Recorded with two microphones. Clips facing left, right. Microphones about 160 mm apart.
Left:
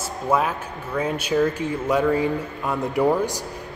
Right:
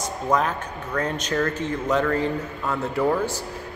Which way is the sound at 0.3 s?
10° left (ahead or behind).